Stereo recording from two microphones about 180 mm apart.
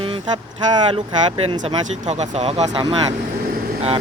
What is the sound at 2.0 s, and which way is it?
Speech, 40° right (ahead or behind).